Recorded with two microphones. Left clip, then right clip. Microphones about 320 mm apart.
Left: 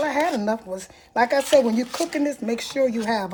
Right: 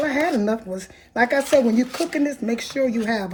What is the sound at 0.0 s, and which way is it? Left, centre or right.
Speech, left.